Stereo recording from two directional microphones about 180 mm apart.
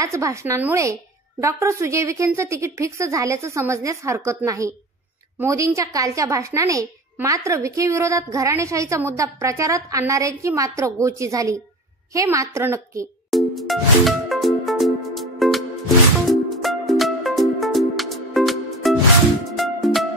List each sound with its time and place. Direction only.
0.0 s a woman's voice: 15° right (ahead or behind)
13.3 s music: centre (ahead or behind)